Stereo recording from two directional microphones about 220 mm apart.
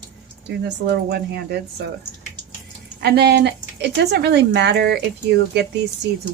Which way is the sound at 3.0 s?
45° right (ahead or behind).